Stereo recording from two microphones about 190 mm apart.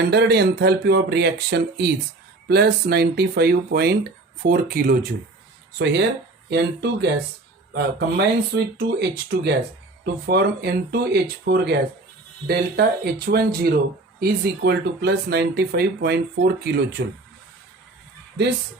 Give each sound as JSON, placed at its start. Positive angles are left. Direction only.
{"t": 0.1, "sound": "speech", "side_deg": -60}
{"t": 5.8, "sound": "speech", "side_deg": -65}